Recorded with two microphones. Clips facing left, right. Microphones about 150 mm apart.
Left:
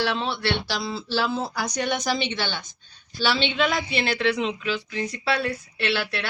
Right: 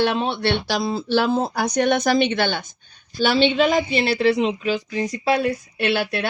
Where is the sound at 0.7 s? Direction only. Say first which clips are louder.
Right 7 dB; 50° right (ahead or behind).